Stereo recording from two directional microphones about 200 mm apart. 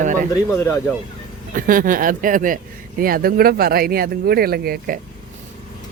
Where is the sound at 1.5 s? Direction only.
45° right (ahead or behind).